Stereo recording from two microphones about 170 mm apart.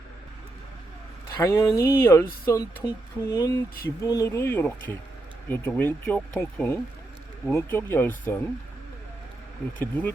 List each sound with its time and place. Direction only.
1.4 s speech: 15° left (ahead or behind)
9.7 s speech: 10° left (ahead or behind)